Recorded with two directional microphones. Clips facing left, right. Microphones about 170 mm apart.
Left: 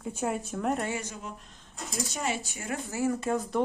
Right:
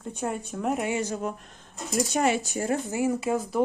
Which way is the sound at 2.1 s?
65° right (ahead or behind).